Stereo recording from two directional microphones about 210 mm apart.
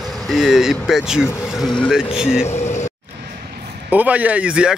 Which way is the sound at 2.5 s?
30° left (ahead or behind).